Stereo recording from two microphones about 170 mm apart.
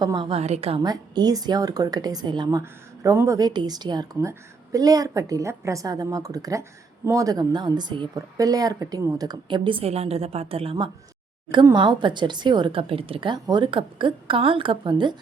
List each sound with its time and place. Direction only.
0.0 s a woman's voice: 25° right (ahead or behind)
0.8 s speech: 25° right (ahead or behind)